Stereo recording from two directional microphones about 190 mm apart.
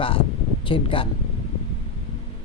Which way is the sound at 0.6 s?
25° left (ahead or behind).